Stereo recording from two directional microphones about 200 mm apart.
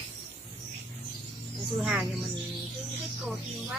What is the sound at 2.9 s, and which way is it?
Music, 10° right (ahead or behind).